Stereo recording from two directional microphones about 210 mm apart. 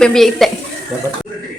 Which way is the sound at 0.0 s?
Centre (ahead or behind).